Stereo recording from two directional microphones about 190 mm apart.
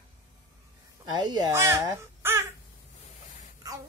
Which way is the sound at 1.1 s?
20° right (ahead or behind).